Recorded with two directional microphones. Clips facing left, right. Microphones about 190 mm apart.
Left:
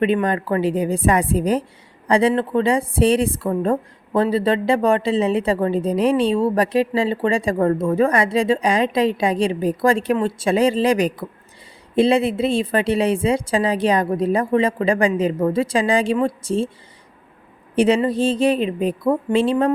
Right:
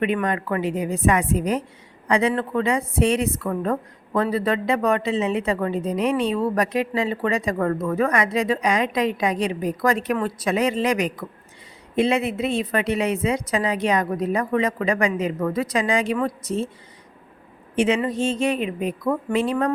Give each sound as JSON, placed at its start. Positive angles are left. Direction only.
{"t": 0.0, "sound": "a woman's voice", "side_deg": 30}
{"t": 17.7, "sound": "a woman's voice", "side_deg": 35}